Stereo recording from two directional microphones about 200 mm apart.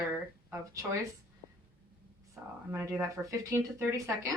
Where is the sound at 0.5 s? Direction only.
15° right (ahead or behind).